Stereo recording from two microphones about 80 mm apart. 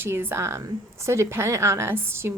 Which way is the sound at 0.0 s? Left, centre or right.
Right.